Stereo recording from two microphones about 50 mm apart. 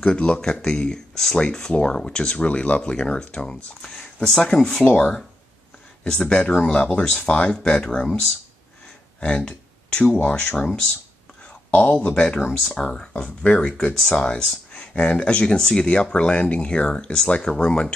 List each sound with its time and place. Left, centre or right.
0.0 s speech: centre
6.2 s speech: left
9.2 s speech: centre
11.7 s speech: left
12.6 s speech: centre